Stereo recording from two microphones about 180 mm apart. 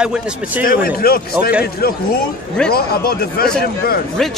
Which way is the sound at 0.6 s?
55° left (ahead or behind).